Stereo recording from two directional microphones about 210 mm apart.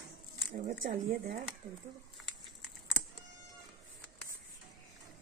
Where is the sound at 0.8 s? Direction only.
40° right (ahead or behind).